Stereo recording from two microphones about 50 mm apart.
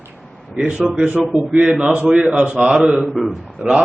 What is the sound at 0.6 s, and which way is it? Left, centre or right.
A man's voice, right.